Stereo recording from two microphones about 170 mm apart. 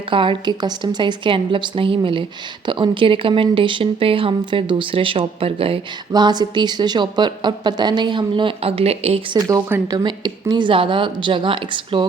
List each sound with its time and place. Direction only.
0.1 s speech: 30° right (ahead or behind)
9.5 s speech: 15° right (ahead or behind)